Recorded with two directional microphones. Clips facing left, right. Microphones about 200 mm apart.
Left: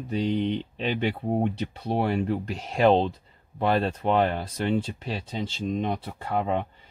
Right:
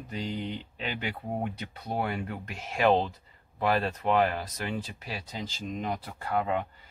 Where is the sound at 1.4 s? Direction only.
25° left (ahead or behind).